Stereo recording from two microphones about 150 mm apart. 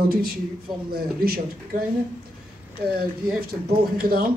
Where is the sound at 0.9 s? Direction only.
90° right.